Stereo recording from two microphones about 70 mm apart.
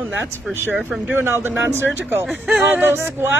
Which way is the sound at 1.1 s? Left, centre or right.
Right.